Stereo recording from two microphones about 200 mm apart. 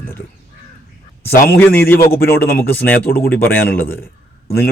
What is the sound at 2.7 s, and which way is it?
Speech, 10° left (ahead or behind).